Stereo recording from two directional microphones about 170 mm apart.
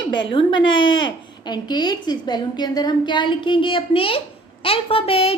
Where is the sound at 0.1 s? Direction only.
30° left (ahead or behind).